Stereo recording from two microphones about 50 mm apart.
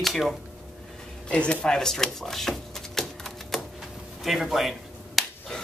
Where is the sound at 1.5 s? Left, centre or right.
Centre.